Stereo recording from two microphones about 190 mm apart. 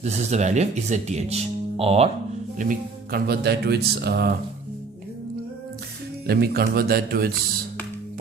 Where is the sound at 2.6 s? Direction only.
50° right (ahead or behind).